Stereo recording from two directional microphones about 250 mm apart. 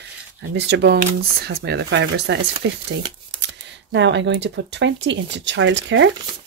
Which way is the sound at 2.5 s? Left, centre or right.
Centre.